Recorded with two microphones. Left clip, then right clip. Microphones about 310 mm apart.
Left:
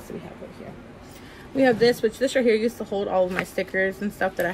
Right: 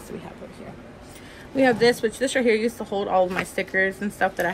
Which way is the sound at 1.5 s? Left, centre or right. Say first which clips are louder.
Even; right.